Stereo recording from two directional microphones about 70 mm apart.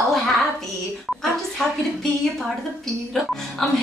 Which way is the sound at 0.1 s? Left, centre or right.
Centre.